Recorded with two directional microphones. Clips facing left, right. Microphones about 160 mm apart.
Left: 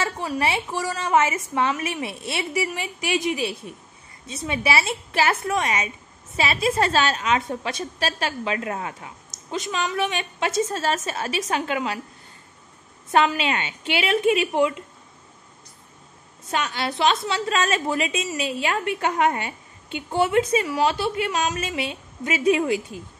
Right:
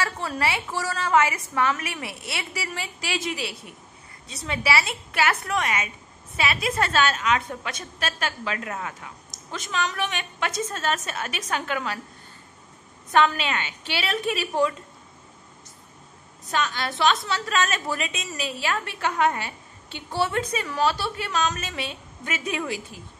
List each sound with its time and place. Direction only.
0.4 s a woman's voice: 20° left (ahead or behind)
13.1 s a woman's voice: 30° left (ahead or behind)
16.4 s a woman's voice: 30° left (ahead or behind)